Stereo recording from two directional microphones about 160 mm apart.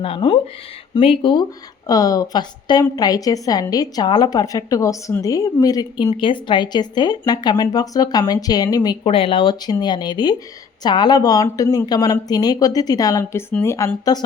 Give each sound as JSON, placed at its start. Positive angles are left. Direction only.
{"t": 0.0, "sound": "a woman's voice", "side_deg": 30}
{"t": 9.0, "sound": "a woman's voice", "side_deg": 35}